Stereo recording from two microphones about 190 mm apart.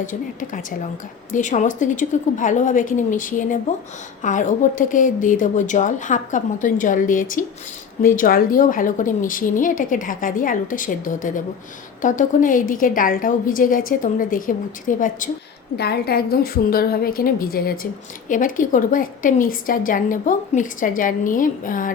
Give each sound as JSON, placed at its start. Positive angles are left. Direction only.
{"t": 0.0, "sound": "a woman's voice", "side_deg": 40}
{"t": 15.8, "sound": "a woman's voice", "side_deg": 55}